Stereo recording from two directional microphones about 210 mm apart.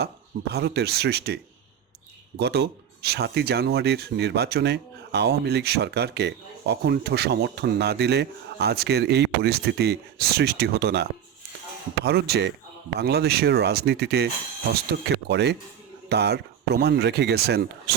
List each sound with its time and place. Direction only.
0.5 s speech: 50° right (ahead or behind)
2.4 s speech: 50° right (ahead or behind)